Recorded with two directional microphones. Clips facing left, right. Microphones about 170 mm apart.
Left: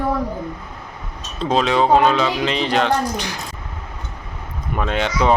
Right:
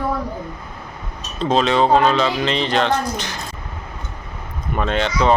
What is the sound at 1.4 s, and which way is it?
Speech, 10° left (ahead or behind).